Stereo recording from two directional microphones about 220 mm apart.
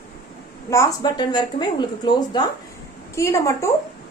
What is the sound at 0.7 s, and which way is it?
A woman's voice, 15° left (ahead or behind).